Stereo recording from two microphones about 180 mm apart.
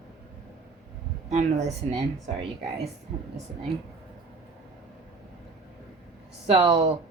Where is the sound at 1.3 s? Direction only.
40° right (ahead or behind).